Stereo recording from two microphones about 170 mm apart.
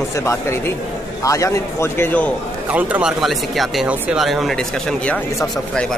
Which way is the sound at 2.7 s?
10° right (ahead or behind).